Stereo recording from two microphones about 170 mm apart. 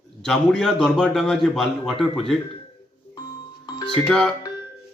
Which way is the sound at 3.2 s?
25° left (ahead or behind).